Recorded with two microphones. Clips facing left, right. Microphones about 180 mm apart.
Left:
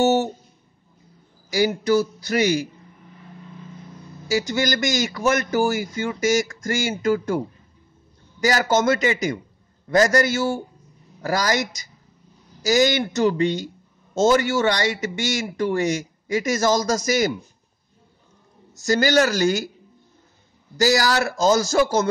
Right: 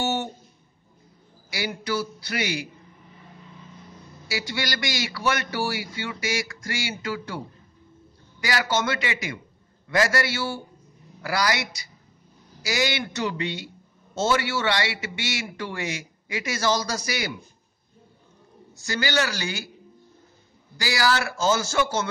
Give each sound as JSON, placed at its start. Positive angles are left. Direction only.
{"t": 0.0, "sound": "music", "side_deg": 45}
{"t": 1.5, "sound": "a man's voice", "side_deg": 45}
{"t": 4.3, "sound": "a man's voice", "side_deg": 45}
{"t": 18.8, "sound": "a man's voice", "side_deg": 45}
{"t": 20.7, "sound": "speech", "side_deg": 45}